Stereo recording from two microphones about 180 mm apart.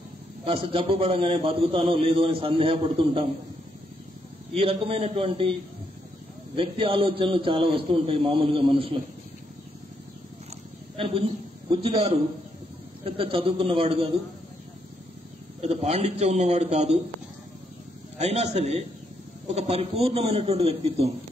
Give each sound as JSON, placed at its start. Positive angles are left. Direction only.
{"t": 0.5, "sound": "a man's voice", "side_deg": -30}
{"t": 4.6, "sound": "a man's voice", "side_deg": -30}
{"t": 11.7, "sound": "a man's voice", "side_deg": -30}
{"t": 15.6, "sound": "a man's voice", "side_deg": -35}
{"t": 18.1, "sound": "a man's voice", "side_deg": -35}